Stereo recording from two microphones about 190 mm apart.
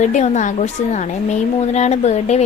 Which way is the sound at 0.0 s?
40° left (ahead or behind).